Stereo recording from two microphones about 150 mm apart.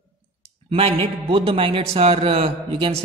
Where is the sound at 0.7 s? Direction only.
40° right (ahead or behind).